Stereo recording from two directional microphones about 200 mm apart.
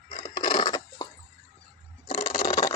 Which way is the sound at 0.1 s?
25° left (ahead or behind).